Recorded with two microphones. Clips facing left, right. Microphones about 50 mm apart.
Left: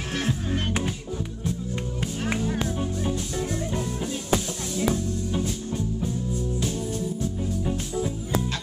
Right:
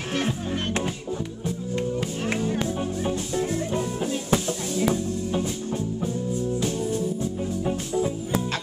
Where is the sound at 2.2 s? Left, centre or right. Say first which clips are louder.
Even; centre.